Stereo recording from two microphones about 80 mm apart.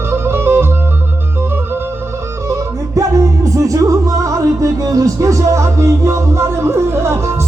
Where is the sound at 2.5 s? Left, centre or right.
Right.